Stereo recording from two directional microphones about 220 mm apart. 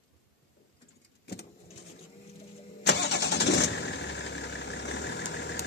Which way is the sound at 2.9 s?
50° left (ahead or behind).